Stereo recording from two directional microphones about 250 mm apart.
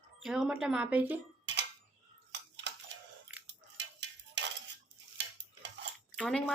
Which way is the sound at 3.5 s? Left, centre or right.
Right.